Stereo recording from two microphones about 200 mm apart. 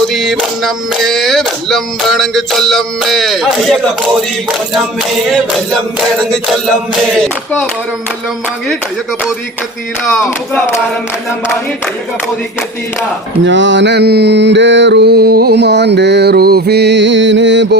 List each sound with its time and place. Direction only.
0.1 s a sound: centre (ahead or behind)
7.2 s speech: 10° left (ahead or behind)
10.2 s speech: 10° left (ahead or behind)
13.4 s music: 65° right (ahead or behind)